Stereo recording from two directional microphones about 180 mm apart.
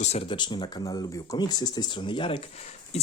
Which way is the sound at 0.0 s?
35° left (ahead or behind).